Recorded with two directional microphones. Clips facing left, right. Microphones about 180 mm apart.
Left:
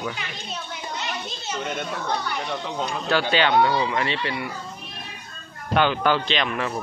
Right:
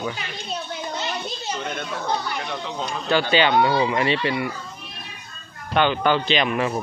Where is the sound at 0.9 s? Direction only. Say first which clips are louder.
Right 1 dB; 35° right (ahead or behind).